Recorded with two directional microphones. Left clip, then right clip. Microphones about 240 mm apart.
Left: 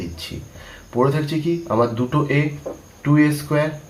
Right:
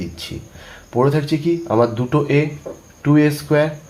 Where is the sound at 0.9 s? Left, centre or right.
Right.